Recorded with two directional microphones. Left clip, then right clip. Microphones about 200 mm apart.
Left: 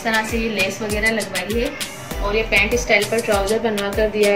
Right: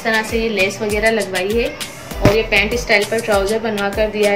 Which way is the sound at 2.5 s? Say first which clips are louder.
Right 1 dB; 55° right (ahead or behind).